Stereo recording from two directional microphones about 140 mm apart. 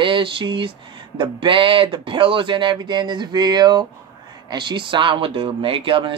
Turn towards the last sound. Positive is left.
turn(degrees=-40)  # may be behind; listen again after turning